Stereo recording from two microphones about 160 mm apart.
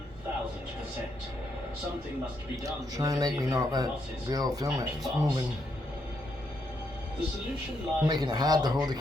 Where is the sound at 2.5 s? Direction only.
20° right (ahead or behind).